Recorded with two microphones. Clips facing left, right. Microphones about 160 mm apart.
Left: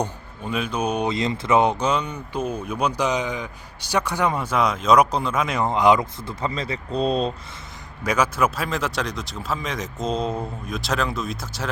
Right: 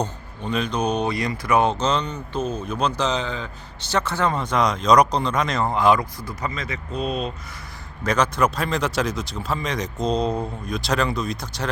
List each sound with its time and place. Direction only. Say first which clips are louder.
0.0 s speech: even; 5° left (ahead or behind)
1.0 s speech: left 1 dB; 25° left (ahead or behind); by 5.6 s 5° left (ahead or behind)
5.6 s speech: left 2 dB; 20° left (ahead or behind)
8.0 s speech: right 1 dB; 10° left (ahead or behind)